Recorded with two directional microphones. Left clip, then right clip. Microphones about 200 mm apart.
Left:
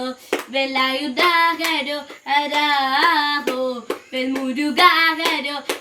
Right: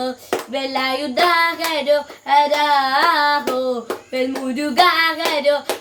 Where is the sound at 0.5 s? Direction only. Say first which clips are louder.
Left 2 dB; 15° right (ahead or behind).